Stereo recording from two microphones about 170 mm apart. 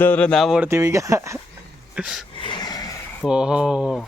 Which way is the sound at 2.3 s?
30° left (ahead or behind).